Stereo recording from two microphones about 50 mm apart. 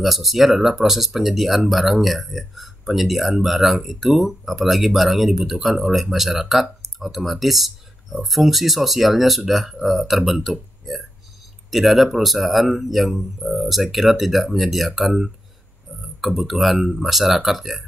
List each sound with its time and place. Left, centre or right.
0.0 s speech: centre